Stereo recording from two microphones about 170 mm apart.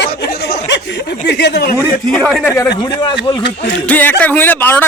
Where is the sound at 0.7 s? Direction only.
90° left.